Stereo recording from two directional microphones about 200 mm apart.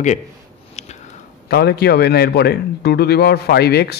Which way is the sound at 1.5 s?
50° left (ahead or behind).